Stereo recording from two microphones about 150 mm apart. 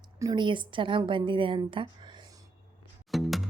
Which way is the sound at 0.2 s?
30° right (ahead or behind).